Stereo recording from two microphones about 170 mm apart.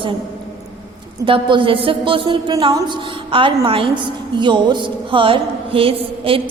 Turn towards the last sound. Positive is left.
turn(degrees=-30)  # may be behind; listen again after turning